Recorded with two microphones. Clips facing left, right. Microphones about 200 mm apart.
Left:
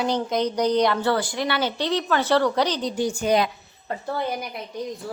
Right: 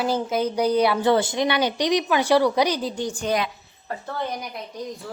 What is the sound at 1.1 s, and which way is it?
A woman's voice, 20° right (ahead or behind).